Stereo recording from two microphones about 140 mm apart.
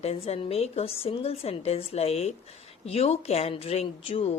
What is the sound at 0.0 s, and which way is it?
Speech, 45° left (ahead or behind).